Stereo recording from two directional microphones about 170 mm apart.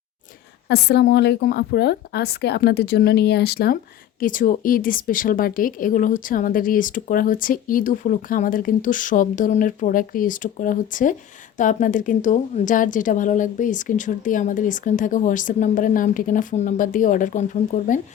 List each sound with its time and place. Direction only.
0.7 s speech: 75° left (ahead or behind)
4.2 s a woman's voice: 50° left (ahead or behind)